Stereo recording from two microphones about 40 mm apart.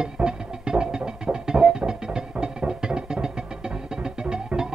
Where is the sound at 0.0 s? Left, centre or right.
Right.